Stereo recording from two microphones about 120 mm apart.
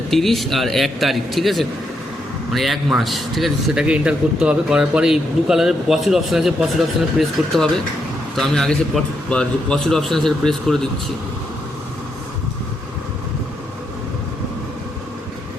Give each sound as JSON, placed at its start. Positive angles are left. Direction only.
{"t": 0.1, "sound": "a man's voice", "side_deg": 0}